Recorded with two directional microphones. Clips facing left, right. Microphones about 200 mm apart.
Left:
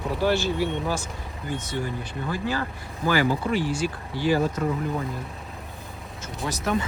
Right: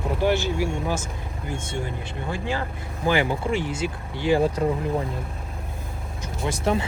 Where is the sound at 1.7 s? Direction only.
25° right (ahead or behind).